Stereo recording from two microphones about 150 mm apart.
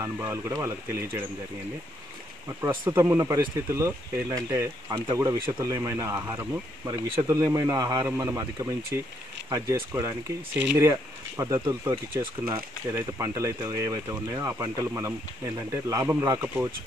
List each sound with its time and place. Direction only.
0.0 s speech: 20° right (ahead or behind)
2.6 s speech: 25° right (ahead or behind)